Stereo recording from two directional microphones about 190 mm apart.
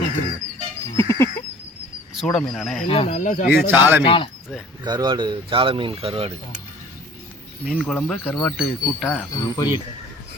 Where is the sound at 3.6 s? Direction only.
10° right (ahead or behind).